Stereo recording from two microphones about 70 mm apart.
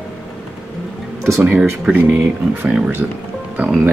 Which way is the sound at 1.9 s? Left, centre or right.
Right.